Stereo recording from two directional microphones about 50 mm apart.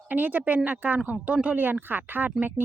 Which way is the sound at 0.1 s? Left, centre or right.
Right.